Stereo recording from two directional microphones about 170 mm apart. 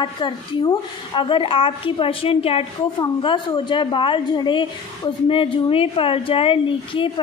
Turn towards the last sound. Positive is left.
turn(degrees=30)  # may be behind; listen again after turning